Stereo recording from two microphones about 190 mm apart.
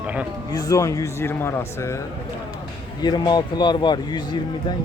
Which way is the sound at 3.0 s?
20° left (ahead or behind).